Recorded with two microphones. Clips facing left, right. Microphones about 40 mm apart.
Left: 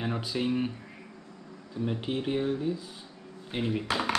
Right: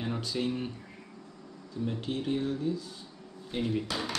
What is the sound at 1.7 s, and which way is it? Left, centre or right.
Speech, left.